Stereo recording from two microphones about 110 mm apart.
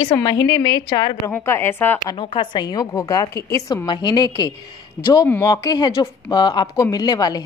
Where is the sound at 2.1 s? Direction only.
50° left (ahead or behind).